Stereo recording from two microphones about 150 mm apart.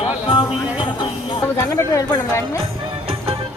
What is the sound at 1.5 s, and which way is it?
Speech, 20° left (ahead or behind).